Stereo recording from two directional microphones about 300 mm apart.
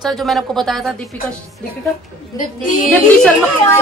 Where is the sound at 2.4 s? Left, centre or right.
Left.